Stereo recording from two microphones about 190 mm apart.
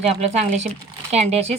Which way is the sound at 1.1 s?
35° right (ahead or behind).